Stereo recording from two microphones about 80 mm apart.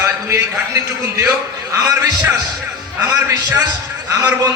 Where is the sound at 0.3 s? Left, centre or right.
Right.